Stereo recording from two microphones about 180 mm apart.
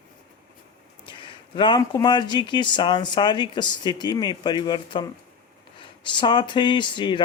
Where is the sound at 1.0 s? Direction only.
25° left (ahead or behind).